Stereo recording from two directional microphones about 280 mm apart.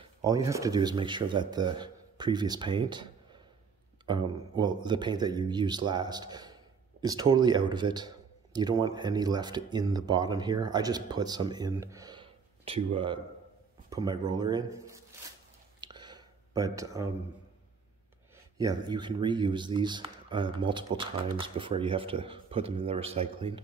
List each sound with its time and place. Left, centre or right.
0.2 s speech: centre
15.8 s a sound: centre
18.6 s speech: centre